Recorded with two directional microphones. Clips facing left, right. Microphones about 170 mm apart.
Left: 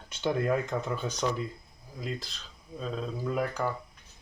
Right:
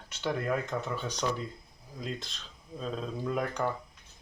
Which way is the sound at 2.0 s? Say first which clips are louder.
Left 1 dB; 5° left (ahead or behind).